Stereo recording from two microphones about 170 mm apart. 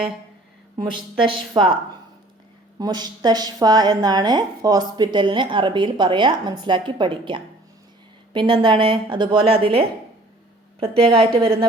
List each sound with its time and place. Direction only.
1.3 s a woman's voice: 30° right (ahead or behind)
2.7 s a woman's voice: 25° right (ahead or behind)